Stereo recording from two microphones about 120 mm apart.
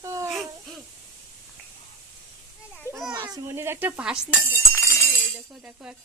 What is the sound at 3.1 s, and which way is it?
Child singing, 35° right (ahead or behind).